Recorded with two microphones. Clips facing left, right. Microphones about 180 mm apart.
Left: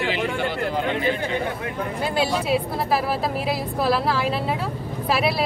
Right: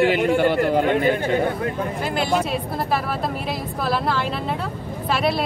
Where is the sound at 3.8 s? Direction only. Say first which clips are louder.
Left 1 dB; centre (ahead or behind).